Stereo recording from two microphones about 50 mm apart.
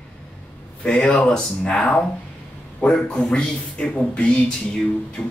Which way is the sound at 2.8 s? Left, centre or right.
Centre.